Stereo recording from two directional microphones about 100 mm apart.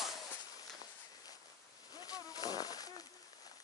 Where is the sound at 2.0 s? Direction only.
40° left (ahead or behind).